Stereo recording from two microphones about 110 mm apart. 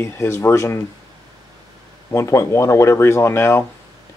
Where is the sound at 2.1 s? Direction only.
25° left (ahead or behind).